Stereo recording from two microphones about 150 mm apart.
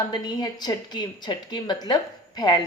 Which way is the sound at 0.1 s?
25° left (ahead or behind).